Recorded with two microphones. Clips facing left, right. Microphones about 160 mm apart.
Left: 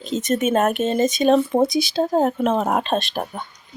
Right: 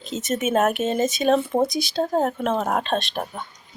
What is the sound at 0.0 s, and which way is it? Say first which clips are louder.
Speech: left 4 dB; 5° right (ahead or behind).